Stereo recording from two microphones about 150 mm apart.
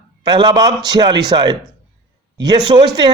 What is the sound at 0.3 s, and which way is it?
Speech, 30° right (ahead or behind).